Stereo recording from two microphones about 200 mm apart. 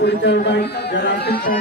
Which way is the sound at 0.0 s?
60° left (ahead or behind).